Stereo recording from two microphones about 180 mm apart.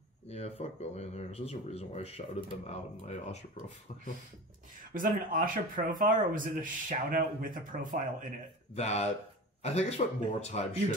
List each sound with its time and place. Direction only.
0.3 s speech: 35° left (ahead or behind)
4.9 s speech: 50° right (ahead or behind)
8.7 s speech: 35° left (ahead or behind)